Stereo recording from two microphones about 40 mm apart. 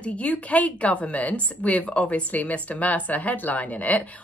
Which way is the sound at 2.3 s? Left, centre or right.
Left.